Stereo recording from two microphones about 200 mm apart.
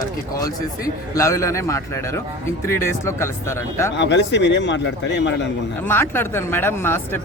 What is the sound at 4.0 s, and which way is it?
A man's voice, 60° left (ahead or behind).